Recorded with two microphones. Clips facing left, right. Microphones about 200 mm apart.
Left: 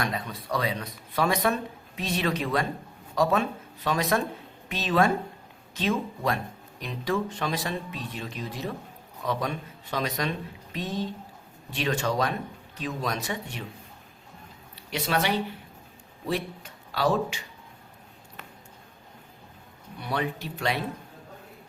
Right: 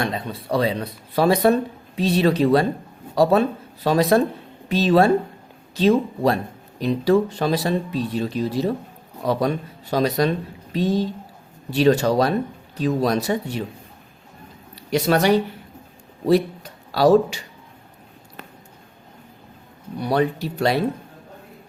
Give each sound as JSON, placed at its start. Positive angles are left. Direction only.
{"t": 0.0, "sound": "speech", "side_deg": -30}
{"t": 14.8, "sound": "speech", "side_deg": -40}
{"t": 20.0, "sound": "speech", "side_deg": -40}